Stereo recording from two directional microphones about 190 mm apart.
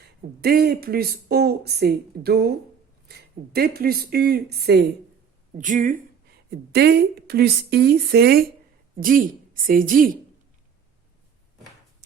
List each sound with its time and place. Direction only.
0.4 s speech: 55° right (ahead or behind)
5.5 s speech: 45° right (ahead or behind)
6.5 s speech: 60° right (ahead or behind)